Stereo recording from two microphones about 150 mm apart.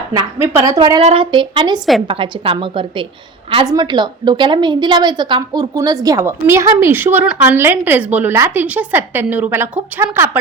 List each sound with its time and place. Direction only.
0.4 s a woman's voice: 20° right (ahead or behind)
1.0 s a woman's voice: 35° right (ahead or behind); by 10.3 s 15° right (ahead or behind)